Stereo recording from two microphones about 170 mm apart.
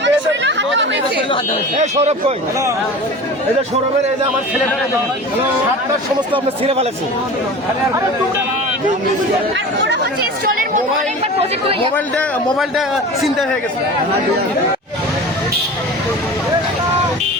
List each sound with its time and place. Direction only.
0.0 s chatter: 90° right
1.8 s a man's voice: 40° right (ahead or behind)
6.3 s a man's voice: 35° right (ahead or behind)
11.9 s a man's voice: 5° left (ahead or behind)